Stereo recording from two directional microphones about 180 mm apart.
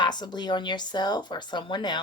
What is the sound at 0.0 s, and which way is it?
Speech, 25° left (ahead or behind).